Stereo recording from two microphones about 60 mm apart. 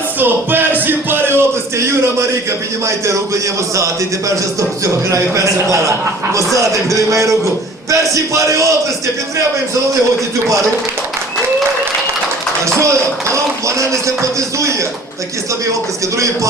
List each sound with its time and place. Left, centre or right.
0.2 s music: right
4.8 s a man's voice: right
12.6 s a man's voice: right
16.1 s a man's voice: right